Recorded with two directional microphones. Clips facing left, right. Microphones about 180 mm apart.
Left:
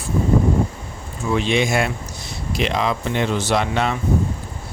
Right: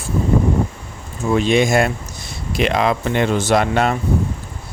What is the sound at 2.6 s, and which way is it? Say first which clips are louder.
Speech: right 4 dB; 60° right (ahead or behind).